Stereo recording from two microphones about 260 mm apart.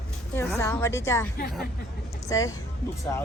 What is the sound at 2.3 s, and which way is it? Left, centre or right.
Speech, centre.